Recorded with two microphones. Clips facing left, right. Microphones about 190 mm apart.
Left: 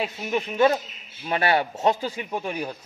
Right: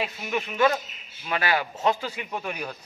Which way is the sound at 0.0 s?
25° left (ahead or behind).